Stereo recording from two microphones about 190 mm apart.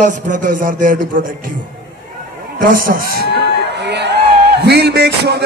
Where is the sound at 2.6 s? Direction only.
50° right (ahead or behind).